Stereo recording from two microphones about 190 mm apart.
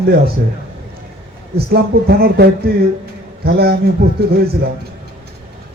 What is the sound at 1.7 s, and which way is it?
A man's voice, 55° right (ahead or behind).